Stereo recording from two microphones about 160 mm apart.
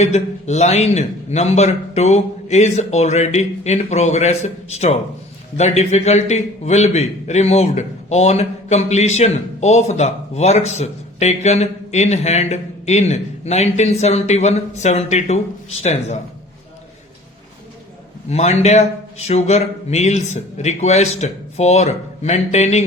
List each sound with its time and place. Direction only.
0.0 s a man's voice: 45° left (ahead or behind)
18.3 s a man's voice: 45° left (ahead or behind)